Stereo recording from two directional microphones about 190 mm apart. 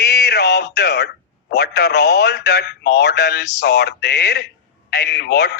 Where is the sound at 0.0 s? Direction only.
60° left (ahead or behind).